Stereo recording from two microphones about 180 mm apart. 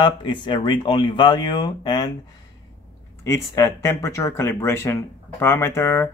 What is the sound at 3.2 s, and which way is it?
Speech, 15° left (ahead or behind).